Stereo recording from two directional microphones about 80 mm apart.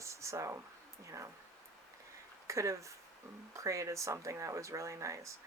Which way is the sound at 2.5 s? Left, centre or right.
Right.